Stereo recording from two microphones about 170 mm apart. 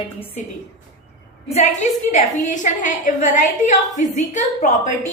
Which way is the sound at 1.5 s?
45° left (ahead or behind).